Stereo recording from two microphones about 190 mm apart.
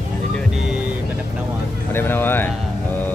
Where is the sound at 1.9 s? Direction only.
10° left (ahead or behind).